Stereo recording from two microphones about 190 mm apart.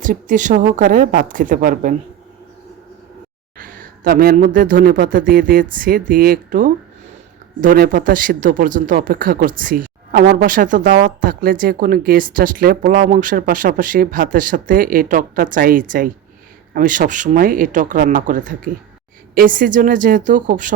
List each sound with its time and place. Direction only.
0.0 s speech: 45° right (ahead or behind)
3.6 s speech: 45° right (ahead or behind)